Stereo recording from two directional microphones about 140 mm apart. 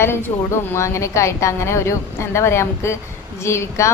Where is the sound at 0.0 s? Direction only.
15° left (ahead or behind).